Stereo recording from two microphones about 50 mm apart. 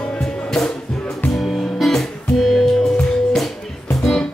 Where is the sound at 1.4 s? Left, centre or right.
Centre.